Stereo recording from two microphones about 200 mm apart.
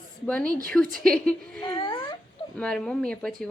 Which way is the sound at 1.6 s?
25° left (ahead or behind).